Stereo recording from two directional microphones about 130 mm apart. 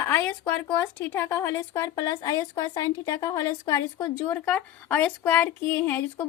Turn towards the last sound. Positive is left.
turn(degrees=20)  # may be behind; listen again after turning